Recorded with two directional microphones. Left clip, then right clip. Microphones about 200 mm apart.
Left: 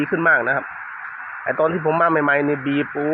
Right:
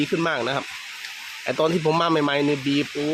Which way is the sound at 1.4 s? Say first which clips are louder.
Left 2 dB; 25° right (ahead or behind).